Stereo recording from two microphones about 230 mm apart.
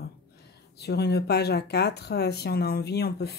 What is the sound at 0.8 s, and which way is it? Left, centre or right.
Speech, left.